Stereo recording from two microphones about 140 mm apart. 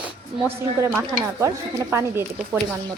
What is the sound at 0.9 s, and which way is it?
Speech, 20° right (ahead or behind).